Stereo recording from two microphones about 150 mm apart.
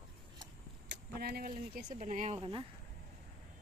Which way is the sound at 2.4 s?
35° right (ahead or behind).